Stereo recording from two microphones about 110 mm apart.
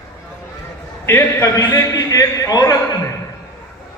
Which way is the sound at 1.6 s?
35° left (ahead or behind).